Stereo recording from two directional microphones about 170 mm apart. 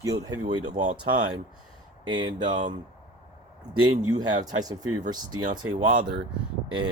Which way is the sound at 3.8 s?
25° right (ahead or behind).